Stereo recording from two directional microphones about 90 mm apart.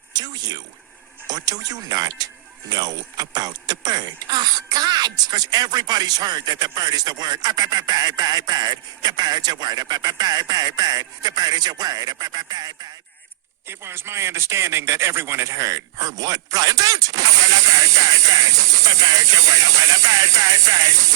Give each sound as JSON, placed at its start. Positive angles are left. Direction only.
{"t": 0.1, "sound": "a sound", "side_deg": -50}
{"t": 1.3, "sound": "speech", "side_deg": -45}
{"t": 13.7, "sound": "speech", "side_deg": -25}